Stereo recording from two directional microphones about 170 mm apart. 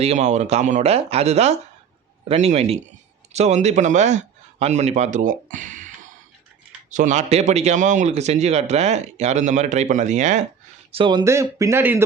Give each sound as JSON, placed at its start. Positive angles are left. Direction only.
{"t": 0.0, "sound": "a man's voice", "side_deg": -40}
{"t": 6.9, "sound": "a man's voice", "side_deg": -45}
{"t": 10.9, "sound": "speech", "side_deg": -30}
{"t": 11.2, "sound": "speech", "side_deg": -15}